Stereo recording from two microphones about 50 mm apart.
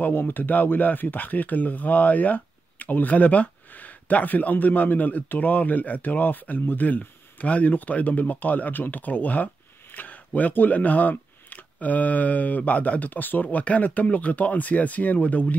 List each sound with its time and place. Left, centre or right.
0.1 s speech: left